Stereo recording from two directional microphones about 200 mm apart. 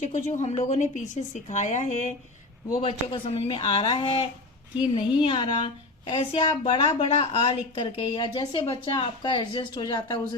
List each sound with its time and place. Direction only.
0.0 s a woman's voice: 35° left (ahead or behind); by 10.2 s 20° left (ahead or behind)